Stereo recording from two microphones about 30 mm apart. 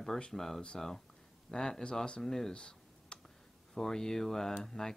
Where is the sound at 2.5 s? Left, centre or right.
Left.